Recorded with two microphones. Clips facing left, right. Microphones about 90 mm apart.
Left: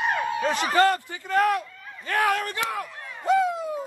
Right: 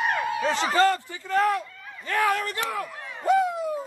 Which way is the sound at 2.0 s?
65° left (ahead or behind).